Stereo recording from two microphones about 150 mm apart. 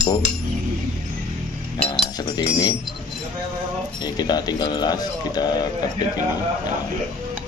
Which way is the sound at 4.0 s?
30° left (ahead or behind).